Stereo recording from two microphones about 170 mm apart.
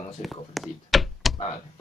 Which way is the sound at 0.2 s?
Centre (ahead or behind).